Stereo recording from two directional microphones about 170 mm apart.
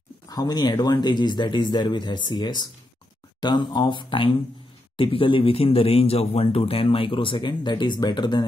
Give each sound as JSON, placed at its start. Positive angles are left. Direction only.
{"t": 0.3, "sound": "speech", "side_deg": 25}